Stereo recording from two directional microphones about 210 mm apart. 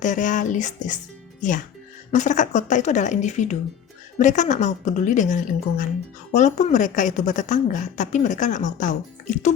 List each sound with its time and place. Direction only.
0.0 s a woman's voice: 35° left (ahead or behind)